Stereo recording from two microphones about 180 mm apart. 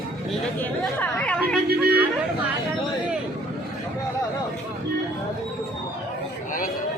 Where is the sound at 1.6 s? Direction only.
60° right (ahead or behind).